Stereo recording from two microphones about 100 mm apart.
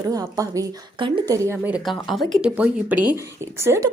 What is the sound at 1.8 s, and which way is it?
Speech, centre (ahead or behind).